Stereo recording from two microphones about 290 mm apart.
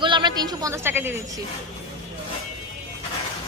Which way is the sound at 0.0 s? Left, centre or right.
Centre.